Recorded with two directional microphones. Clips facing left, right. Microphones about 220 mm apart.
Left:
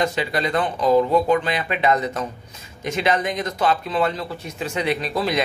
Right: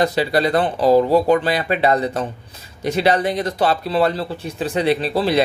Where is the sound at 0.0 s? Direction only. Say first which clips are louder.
Right 5 dB; 35° right (ahead or behind).